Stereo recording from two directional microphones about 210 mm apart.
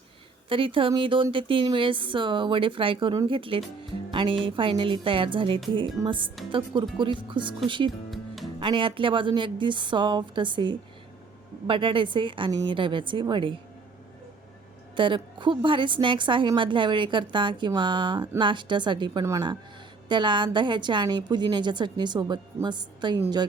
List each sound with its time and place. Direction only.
0.4 s a woman's voice: 25° right (ahead or behind)
14.9 s a woman's voice: 25° right (ahead or behind)